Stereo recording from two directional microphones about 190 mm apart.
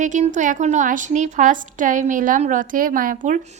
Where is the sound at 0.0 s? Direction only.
40° right (ahead or behind).